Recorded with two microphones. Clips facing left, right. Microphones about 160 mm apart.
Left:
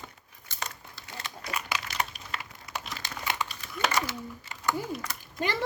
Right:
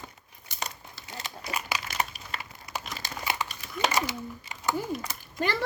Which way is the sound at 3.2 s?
10° right (ahead or behind).